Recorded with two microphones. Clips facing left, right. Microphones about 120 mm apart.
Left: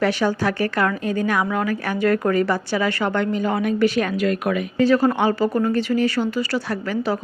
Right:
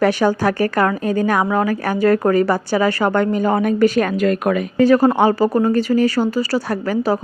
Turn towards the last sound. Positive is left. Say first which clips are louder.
# right 5 dB
turn(degrees=-40)  # may be behind; listen again after turning